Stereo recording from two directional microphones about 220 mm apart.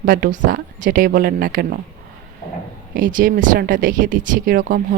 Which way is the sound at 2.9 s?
40° right (ahead or behind).